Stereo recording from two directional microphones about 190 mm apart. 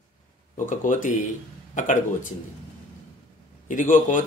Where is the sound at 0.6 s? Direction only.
40° left (ahead or behind).